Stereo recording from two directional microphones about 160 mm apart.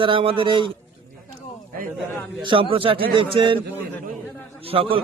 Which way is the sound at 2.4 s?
35° right (ahead or behind).